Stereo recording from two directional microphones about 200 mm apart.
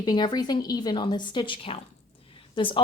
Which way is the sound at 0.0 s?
20° left (ahead or behind).